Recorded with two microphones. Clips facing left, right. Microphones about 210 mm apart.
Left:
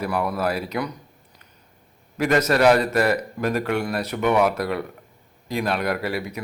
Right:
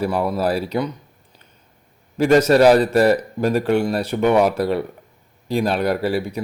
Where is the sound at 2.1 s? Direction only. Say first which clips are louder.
Right 6 dB; 30° right (ahead or behind).